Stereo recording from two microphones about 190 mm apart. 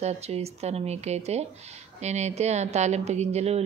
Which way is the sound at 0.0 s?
35° right (ahead or behind).